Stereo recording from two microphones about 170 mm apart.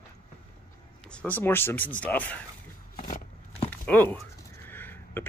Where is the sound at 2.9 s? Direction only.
50° left (ahead or behind).